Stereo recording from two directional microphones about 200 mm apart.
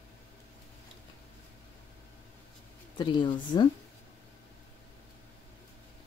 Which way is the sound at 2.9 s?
20° left (ahead or behind).